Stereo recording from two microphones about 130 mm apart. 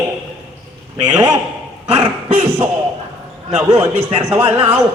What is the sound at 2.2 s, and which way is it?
A man's voice, 50° right (ahead or behind).